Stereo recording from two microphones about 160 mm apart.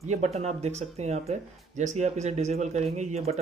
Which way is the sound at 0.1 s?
45° right (ahead or behind).